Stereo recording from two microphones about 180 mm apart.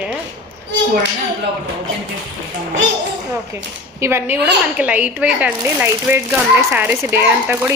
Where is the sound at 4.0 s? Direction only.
15° right (ahead or behind).